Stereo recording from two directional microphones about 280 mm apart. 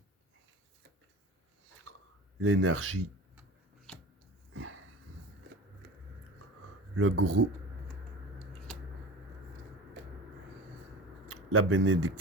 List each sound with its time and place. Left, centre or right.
2.4 s speech: right
3.9 s a sound: centre
4.5 s sniff: right
6.9 s speech: right
11.3 s speech: right